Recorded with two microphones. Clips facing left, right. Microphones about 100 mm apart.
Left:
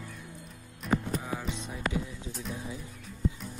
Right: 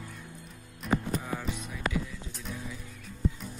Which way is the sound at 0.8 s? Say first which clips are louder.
Even; 10° left (ahead or behind).